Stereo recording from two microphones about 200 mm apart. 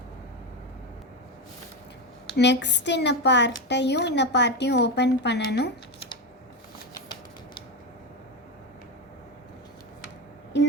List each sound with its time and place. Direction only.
2.3 s a woman's voice: 60° left (ahead or behind)